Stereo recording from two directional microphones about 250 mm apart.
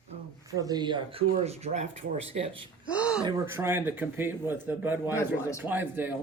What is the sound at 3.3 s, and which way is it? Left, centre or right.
Speech, centre.